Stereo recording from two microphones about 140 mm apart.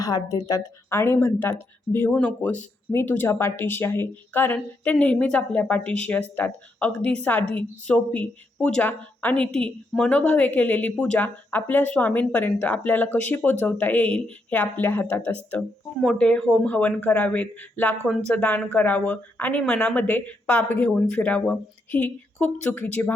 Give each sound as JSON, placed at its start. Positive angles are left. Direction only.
{"t": 0.0, "sound": "a woman's voice", "side_deg": 25}
{"t": 0.9, "sound": "a woman's voice", "side_deg": 15}